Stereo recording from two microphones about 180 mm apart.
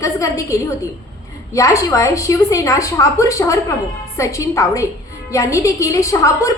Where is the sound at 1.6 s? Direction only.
15° left (ahead or behind).